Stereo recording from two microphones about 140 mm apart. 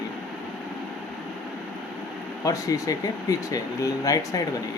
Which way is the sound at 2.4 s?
25° left (ahead or behind).